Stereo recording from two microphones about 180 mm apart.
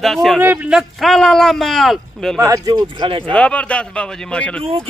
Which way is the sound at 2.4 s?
20° right (ahead or behind).